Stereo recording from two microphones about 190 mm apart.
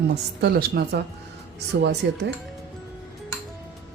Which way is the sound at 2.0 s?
65° right (ahead or behind).